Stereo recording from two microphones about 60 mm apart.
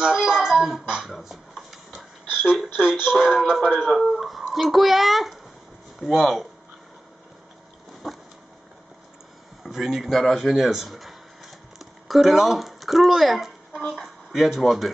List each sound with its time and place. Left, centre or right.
0.0 s speech: centre
0.8 s music: centre
1.1 s a sound: centre
2.2 s a sound: centre
2.5 s a child's voice: centre
8.0 s speech: centre
9.6 s speech: centre